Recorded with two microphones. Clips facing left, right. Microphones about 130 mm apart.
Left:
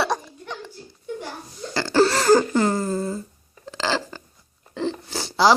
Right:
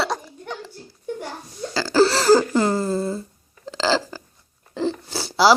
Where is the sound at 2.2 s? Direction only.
20° left (ahead or behind).